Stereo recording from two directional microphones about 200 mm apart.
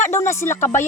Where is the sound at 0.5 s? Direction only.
40° left (ahead or behind).